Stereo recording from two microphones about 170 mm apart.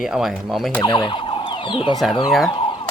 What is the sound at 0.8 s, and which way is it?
Speech, 25° left (ahead or behind).